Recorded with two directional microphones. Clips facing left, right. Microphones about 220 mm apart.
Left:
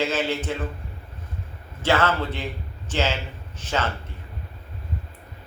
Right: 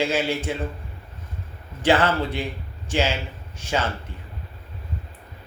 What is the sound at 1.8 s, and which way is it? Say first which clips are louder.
A man's voice: right 2 dB; 15° right (ahead or behind).